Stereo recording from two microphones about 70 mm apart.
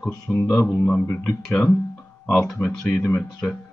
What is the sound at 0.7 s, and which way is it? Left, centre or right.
Speech, centre.